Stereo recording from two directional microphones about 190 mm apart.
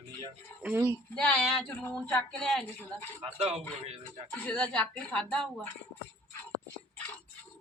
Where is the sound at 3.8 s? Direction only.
35° right (ahead or behind).